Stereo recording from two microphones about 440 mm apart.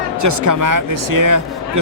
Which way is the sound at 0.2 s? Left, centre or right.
Right.